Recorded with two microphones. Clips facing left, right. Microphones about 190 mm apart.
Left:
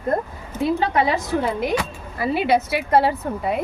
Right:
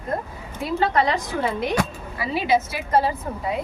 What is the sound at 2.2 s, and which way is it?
Speech, 60° left (ahead or behind).